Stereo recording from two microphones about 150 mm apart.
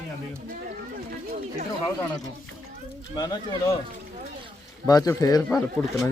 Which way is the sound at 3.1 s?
25° left (ahead or behind).